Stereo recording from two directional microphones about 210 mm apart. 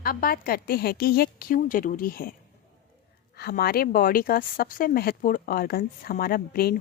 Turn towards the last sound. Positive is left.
turn(degrees=45)  # may be behind; listen again after turning